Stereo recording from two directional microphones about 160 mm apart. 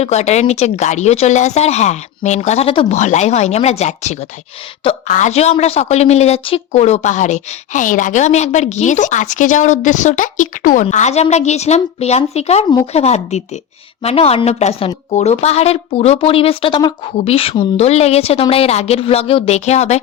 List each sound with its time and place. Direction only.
0.0 s a woman's voice: 45° left (ahead or behind)
10.8 s a woman's voice: 45° left (ahead or behind)